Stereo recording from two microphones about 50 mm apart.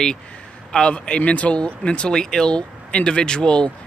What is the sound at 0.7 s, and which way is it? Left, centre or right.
Speech, centre.